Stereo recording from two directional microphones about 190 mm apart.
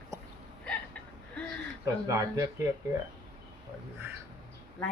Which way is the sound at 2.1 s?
15° right (ahead or behind).